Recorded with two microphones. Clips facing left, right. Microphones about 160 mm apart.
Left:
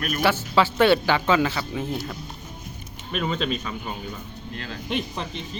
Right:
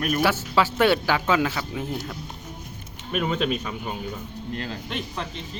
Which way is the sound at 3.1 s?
10° right (ahead or behind).